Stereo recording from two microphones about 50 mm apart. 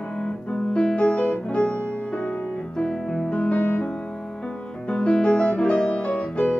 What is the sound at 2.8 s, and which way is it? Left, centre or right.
Music, centre.